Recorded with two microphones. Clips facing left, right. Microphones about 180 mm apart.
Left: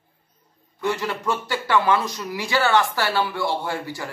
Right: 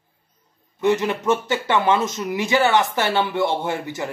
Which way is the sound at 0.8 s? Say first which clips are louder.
Right 6 dB; 20° right (ahead or behind).